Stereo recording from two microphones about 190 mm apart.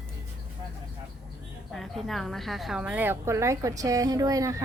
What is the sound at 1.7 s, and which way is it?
A woman's voice, centre (ahead or behind).